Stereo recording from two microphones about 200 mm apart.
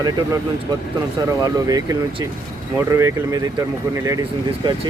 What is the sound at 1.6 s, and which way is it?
Speech, 20° right (ahead or behind).